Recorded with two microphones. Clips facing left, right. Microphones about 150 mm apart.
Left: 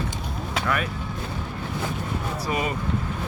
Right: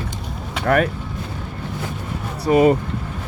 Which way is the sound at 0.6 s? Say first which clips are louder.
Right 10 dB; 60° right (ahead or behind).